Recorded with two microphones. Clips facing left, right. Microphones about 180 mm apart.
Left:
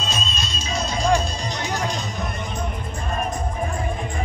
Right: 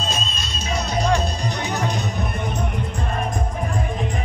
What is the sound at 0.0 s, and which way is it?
Music, 60° right (ahead or behind).